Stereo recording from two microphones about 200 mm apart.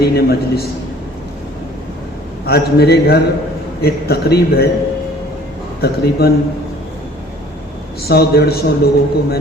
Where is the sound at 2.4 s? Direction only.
50° left (ahead or behind).